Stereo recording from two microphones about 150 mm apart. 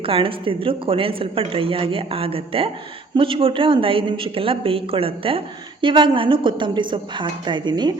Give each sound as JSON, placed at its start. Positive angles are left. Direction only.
{"t": 0.0, "sound": "speech", "side_deg": -35}